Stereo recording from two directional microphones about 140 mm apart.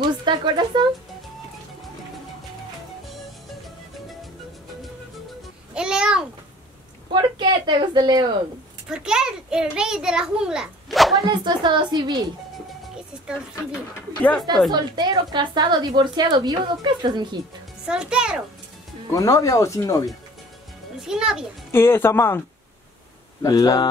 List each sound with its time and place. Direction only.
0.0 s speech: 35° right (ahead or behind)
5.8 s a sound: 5° right (ahead or behind)
7.2 s a sound: 35° right (ahead or behind)
8.8 s a child's voice: 5° right (ahead or behind)
11.2 s a woman's voice: 30° right (ahead or behind)
14.7 s a woman's voice: 30° right (ahead or behind)
17.8 s a child's voice: 5° right (ahead or behind)
19.1 s speech: 25° left (ahead or behind)
21.0 s a child's voice: 5° right (ahead or behind)
21.7 s speech: 15° left (ahead or behind)
23.4 s speech: 25° left (ahead or behind)